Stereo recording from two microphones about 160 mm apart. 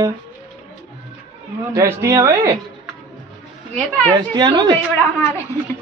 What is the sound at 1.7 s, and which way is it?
Speech, 20° right (ahead or behind).